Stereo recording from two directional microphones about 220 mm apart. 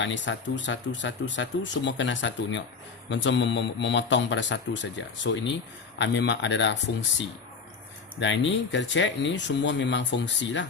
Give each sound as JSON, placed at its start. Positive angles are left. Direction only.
{"t": 0.0, "sound": "speech", "side_deg": 55}
{"t": 8.2, "sound": "speech", "side_deg": 55}